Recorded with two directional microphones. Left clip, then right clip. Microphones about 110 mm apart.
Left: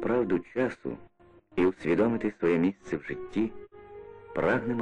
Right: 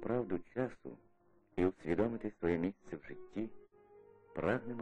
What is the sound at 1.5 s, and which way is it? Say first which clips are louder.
Speech: left 9 dB; 35° right (ahead or behind).